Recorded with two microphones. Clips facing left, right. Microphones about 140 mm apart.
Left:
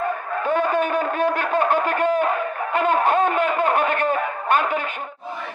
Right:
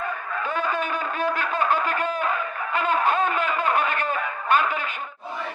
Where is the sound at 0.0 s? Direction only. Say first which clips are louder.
Left 5 dB; 45° left (ahead or behind).